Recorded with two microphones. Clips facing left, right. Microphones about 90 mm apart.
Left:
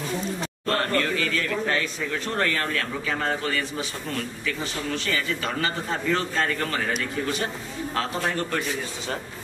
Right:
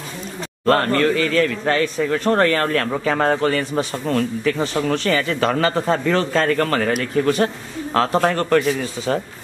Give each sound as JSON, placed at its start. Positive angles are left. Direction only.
{"t": 0.7, "sound": "a man's voice", "side_deg": -55}